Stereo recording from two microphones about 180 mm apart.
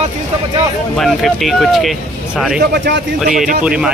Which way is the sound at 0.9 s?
Centre (ahead or behind).